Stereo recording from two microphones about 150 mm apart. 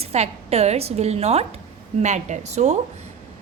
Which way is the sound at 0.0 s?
45° right (ahead or behind).